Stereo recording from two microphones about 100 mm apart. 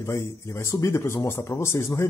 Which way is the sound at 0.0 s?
30° left (ahead or behind).